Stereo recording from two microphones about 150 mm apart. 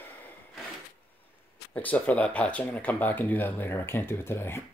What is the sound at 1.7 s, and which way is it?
Speech, 10° left (ahead or behind).